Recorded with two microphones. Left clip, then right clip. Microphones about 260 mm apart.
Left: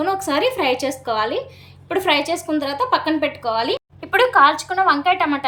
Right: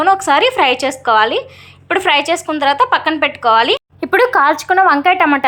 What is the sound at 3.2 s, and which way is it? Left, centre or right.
A woman's voice, right.